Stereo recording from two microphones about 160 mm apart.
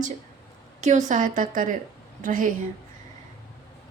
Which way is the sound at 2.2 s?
55° right (ahead or behind).